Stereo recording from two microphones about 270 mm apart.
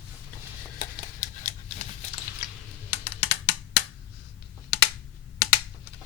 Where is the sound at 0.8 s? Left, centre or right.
Left.